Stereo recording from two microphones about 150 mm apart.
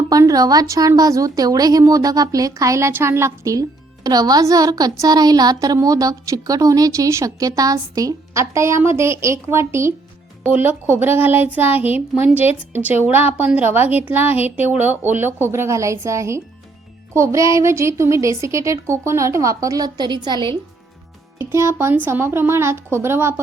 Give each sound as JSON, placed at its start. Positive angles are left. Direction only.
{"t": 0.1, "sound": "a woman's voice", "side_deg": -25}
{"t": 21.3, "sound": "a woman's voice", "side_deg": -15}